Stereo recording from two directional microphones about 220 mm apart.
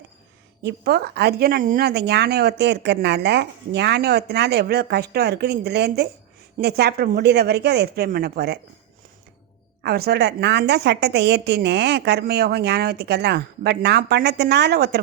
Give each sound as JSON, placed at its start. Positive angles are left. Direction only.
{"t": 0.6, "sound": "speech", "side_deg": -45}
{"t": 9.8, "sound": "speech", "side_deg": -45}